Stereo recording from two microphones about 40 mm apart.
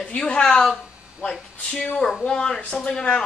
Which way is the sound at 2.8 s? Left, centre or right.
Centre.